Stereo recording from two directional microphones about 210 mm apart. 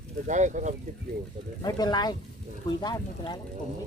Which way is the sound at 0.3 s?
35° right (ahead or behind).